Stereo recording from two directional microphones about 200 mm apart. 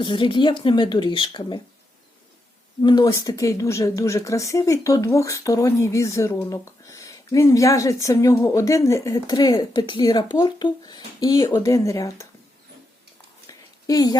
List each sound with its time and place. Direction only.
0.0 s speech: 25° left (ahead or behind)
2.8 s speech: 20° left (ahead or behind)
13.5 s a sound: 20° left (ahead or behind)